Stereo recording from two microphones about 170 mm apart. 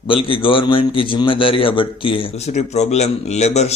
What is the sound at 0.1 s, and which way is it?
A man's voice, 30° left (ahead or behind).